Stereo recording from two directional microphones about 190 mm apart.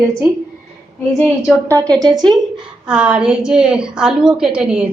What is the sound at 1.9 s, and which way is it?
Speech, 20° right (ahead or behind).